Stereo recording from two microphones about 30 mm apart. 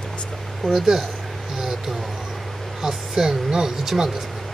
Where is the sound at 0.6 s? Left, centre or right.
Centre.